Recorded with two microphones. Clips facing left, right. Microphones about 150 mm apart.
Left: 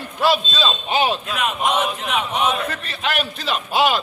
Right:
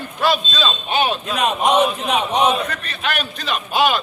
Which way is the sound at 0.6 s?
25° left (ahead or behind).